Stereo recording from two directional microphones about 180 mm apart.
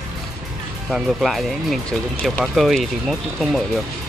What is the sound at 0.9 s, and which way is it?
Speech, centre (ahead or behind).